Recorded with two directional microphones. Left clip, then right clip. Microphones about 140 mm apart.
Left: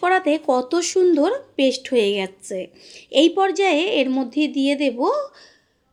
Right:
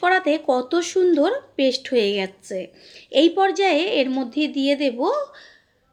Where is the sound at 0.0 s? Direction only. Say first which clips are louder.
Even; 30° left (ahead or behind).